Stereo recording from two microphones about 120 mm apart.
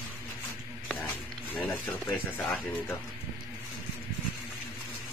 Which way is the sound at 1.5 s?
15° left (ahead or behind).